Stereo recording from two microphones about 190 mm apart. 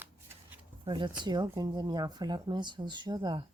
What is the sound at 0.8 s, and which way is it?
Speech, 25° right (ahead or behind).